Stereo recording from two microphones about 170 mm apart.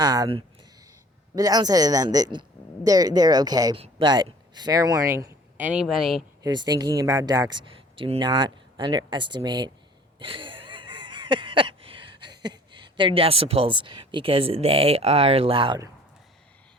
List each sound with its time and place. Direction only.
0.0 s speech: 25° right (ahead or behind); by 6.2 s centre (ahead or behind)
6.4 s speech: 25° right (ahead or behind)
10.2 s wheeze: 30° right (ahead or behind)